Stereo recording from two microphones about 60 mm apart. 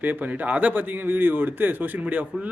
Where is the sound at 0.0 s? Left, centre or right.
Right.